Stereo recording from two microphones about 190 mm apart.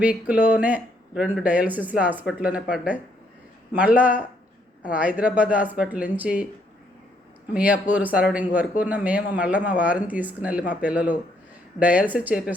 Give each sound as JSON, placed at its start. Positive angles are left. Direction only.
{"t": 0.0, "sound": "speech", "side_deg": -5}
{"t": 7.5, "sound": "speech", "side_deg": -5}